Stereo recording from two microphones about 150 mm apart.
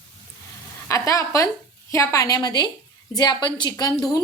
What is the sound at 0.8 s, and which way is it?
A woman's voice, 20° left (ahead or behind).